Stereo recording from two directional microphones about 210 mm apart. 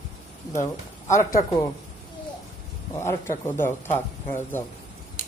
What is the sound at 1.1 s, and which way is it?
Speech, 40° left (ahead or behind).